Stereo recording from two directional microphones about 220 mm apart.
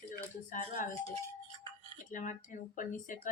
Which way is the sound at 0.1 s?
35° left (ahead or behind).